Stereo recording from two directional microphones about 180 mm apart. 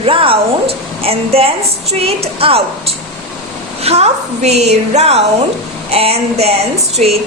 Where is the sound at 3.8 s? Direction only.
35° right (ahead or behind).